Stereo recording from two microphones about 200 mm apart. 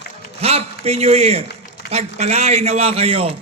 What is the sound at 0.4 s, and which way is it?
A woman's voice, 30° right (ahead or behind).